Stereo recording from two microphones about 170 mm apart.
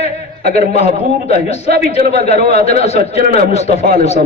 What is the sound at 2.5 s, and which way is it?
Speech, 65° right (ahead or behind).